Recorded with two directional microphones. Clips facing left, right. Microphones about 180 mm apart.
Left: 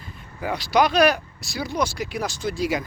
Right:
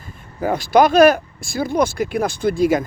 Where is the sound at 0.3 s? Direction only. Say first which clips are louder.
Right 6 dB; 45° right (ahead or behind).